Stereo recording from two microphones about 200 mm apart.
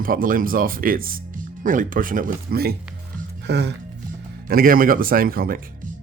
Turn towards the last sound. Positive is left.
turn(degrees=-45)  # may be behind; listen again after turning